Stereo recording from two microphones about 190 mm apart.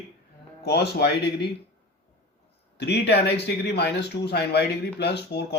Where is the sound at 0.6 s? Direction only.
60° left (ahead or behind).